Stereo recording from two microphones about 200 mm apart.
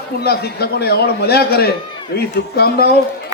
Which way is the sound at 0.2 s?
50° left (ahead or behind).